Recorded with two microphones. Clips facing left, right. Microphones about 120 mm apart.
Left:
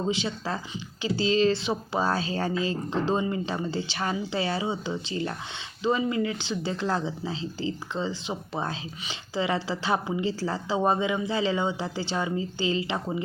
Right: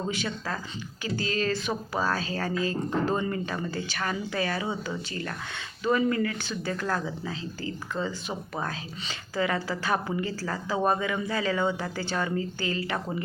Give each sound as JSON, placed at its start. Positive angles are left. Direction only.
{"t": 0.0, "sound": "speech", "side_deg": 25}